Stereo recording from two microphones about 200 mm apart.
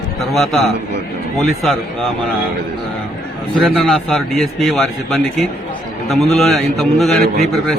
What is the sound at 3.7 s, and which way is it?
A man's voice, centre (ahead or behind).